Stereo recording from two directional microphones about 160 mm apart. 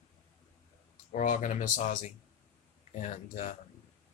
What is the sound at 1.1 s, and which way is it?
Speech, 55° left (ahead or behind).